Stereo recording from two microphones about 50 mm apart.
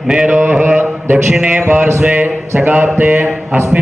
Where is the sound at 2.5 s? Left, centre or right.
Right.